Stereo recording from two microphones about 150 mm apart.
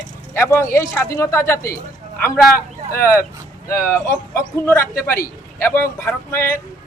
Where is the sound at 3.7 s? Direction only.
15° left (ahead or behind).